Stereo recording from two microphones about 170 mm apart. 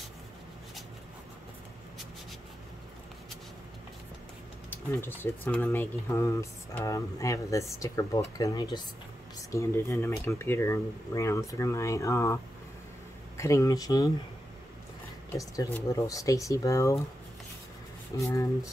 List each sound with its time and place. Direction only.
4.6 s speech: 10° left (ahead or behind)
13.4 s speech: 15° left (ahead or behind)
15.3 s speech: 20° left (ahead or behind)
18.3 s speech: 15° left (ahead or behind)